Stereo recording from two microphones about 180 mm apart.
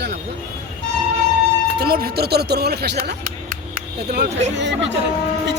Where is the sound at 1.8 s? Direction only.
60° right (ahead or behind).